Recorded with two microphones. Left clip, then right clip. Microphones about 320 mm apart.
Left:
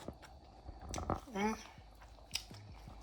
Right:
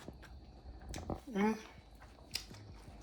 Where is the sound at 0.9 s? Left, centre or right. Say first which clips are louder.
Left 4 dB; left.